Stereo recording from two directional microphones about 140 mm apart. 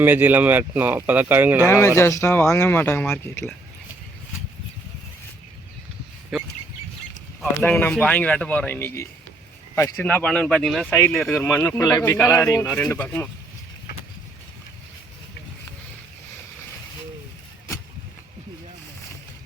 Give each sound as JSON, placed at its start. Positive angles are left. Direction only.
{"t": 0.0, "sound": "speech", "side_deg": -15}
{"t": 2.0, "sound": "speech", "side_deg": 20}
{"t": 6.3, "sound": "speech", "side_deg": 0}
{"t": 7.6, "sound": "speech", "side_deg": 10}
{"t": 10.8, "sound": "speech", "side_deg": 15}
{"t": 11.2, "sound": "speech", "side_deg": 0}
{"t": 11.6, "sound": "speech", "side_deg": 20}